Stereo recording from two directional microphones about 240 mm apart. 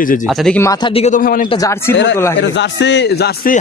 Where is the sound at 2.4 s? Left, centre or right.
Left.